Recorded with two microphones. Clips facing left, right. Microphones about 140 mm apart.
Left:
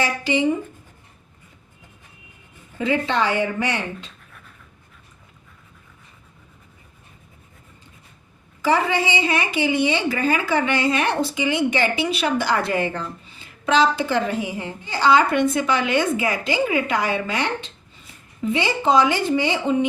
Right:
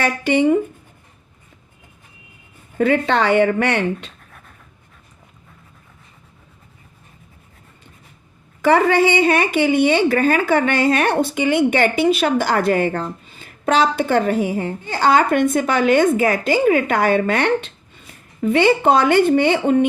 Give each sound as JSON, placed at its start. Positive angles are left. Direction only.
{"t": 0.0, "sound": "speech", "side_deg": -60}
{"t": 2.7, "sound": "speech", "side_deg": -60}
{"t": 8.6, "sound": "a woman's voice", "side_deg": -60}